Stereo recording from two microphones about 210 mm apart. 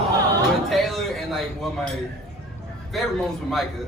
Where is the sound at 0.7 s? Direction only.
Centre (ahead or behind).